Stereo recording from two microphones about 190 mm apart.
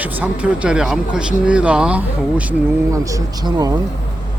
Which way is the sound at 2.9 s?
15° right (ahead or behind).